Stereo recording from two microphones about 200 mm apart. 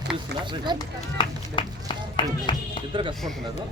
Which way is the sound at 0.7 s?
20° right (ahead or behind).